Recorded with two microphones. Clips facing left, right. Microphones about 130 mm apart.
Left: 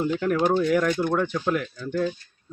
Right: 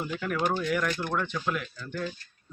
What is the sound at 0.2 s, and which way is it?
Speech, 40° left (ahead or behind).